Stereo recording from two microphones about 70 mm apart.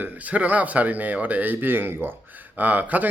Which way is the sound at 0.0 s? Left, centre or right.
Right.